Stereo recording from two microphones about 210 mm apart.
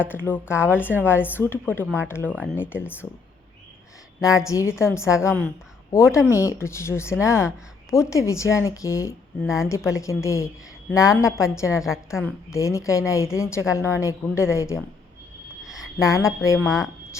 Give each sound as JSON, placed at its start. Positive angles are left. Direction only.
{"t": 0.0, "sound": "a woman's voice", "side_deg": 10}
{"t": 0.7, "sound": "a woman's voice", "side_deg": -5}
{"t": 1.0, "sound": "a woman's voice", "side_deg": 10}
{"t": 4.2, "sound": "a woman's voice", "side_deg": 15}
{"t": 11.8, "sound": "a woman's voice", "side_deg": 0}
{"t": 12.5, "sound": "a woman's voice", "side_deg": 15}
{"t": 15.6, "sound": "a sound", "side_deg": 0}
{"t": 16.0, "sound": "a woman's voice", "side_deg": 15}
{"t": 16.6, "sound": "a woman's voice", "side_deg": 0}